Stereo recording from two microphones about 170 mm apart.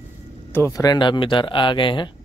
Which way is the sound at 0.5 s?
15° left (ahead or behind).